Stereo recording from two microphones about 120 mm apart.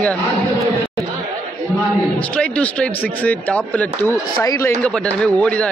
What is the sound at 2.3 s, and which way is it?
Speech, 10° left (ahead or behind).